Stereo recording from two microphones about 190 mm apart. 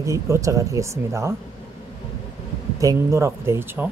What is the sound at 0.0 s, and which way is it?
Speech, 15° right (ahead or behind).